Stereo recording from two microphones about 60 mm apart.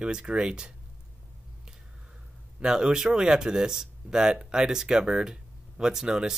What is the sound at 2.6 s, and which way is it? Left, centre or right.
A man's voice, centre.